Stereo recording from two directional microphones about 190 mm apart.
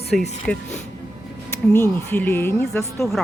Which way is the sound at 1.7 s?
10° left (ahead or behind).